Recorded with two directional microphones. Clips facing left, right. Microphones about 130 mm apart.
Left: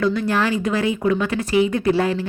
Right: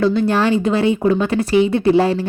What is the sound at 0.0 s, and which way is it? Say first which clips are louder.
Speech: right 4 dB; 30° right (ahead or behind).